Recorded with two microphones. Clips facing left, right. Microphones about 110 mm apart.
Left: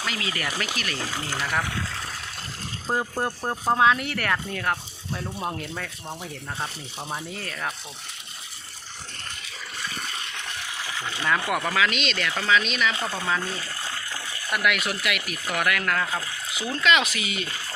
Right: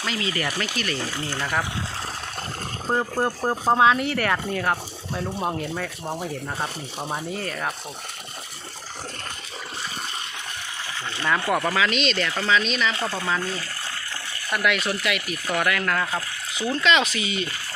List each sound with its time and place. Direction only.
0.0 s speech: 5° left (ahead or behind)
3.0 s speech: 5° right (ahead or behind)
3.8 s speech: centre (ahead or behind)
7.3 s speech: 5° right (ahead or behind)
11.1 s speech: 5° left (ahead or behind)